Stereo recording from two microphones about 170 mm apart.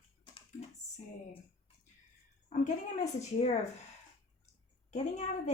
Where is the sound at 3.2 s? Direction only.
40° left (ahead or behind).